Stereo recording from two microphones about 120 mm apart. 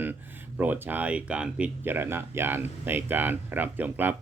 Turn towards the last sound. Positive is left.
turn(degrees=-15)  # may be behind; listen again after turning